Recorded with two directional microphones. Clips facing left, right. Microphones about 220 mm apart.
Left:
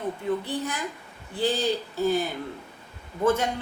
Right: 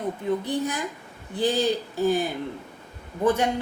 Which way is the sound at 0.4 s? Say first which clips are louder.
Right 4 dB; 15° right (ahead or behind).